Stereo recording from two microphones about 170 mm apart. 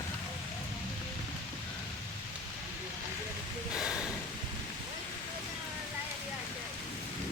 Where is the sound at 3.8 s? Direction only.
5° right (ahead or behind).